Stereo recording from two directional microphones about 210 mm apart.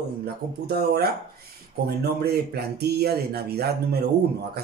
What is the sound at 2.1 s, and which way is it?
Speech, 50° right (ahead or behind).